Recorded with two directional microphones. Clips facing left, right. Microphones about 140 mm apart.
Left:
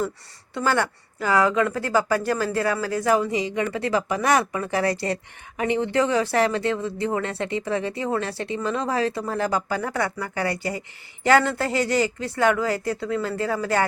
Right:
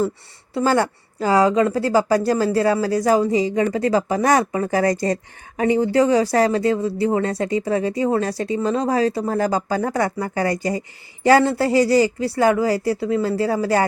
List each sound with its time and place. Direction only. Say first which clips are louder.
0.5 s a woman's voice: right 5 dB; 35° right (ahead or behind)
10.7 s speech: right 6 dB; 20° right (ahead or behind)